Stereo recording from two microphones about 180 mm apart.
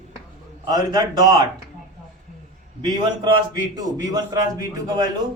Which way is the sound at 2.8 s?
25° right (ahead or behind).